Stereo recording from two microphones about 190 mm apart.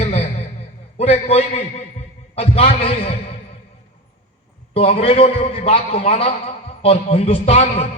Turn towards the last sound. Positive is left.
turn(degrees=35)  # may be behind; listen again after turning